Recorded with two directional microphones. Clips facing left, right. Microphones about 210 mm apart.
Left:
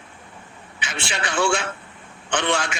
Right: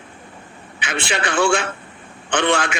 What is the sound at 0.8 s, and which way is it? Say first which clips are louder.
A man's voice: right 6 dB; 55° right (ahead or behind).